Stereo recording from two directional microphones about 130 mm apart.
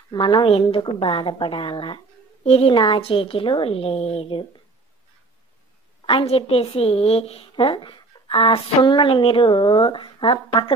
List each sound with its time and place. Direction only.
0.1 s a woman's voice: 40° left (ahead or behind)
6.0 s a woman's voice: 45° left (ahead or behind)